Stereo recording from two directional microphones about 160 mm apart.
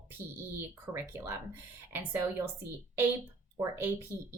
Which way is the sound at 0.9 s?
15° right (ahead or behind).